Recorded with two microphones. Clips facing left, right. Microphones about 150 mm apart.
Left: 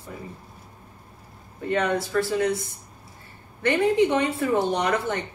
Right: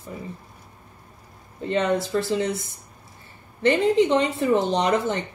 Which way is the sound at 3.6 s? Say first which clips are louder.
Right 2 dB; 20° right (ahead or behind).